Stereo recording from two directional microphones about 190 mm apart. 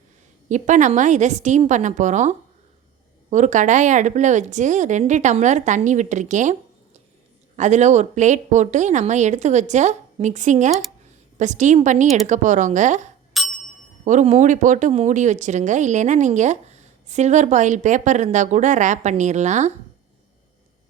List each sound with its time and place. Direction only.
0.4 s speech: 40° right (ahead or behind)
13.4 s bicycle bell: centre (ahead or behind)
14.0 s speech: 40° right (ahead or behind)